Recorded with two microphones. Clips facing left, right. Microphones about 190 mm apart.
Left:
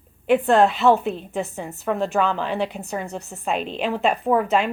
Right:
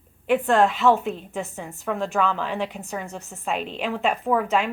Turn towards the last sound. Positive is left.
turn(degrees=35)  # may be behind; listen again after turning